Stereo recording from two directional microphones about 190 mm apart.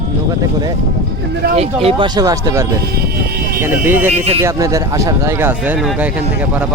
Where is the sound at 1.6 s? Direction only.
30° right (ahead or behind).